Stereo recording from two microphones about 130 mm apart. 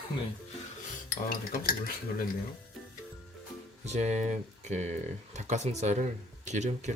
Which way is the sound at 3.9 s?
60° right (ahead or behind).